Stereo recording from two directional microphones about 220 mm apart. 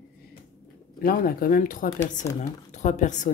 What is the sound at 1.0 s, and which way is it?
A woman's voice, 40° left (ahead or behind).